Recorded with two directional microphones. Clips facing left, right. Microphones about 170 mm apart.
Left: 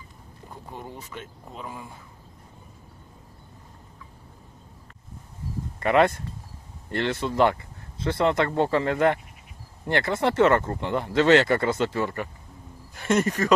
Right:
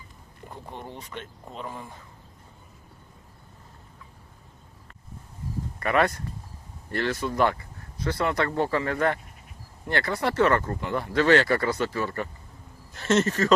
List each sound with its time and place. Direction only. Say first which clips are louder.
0.5 s speech: even; 5° left (ahead or behind)
5.8 s speech: left 4 dB; 25° left (ahead or behind)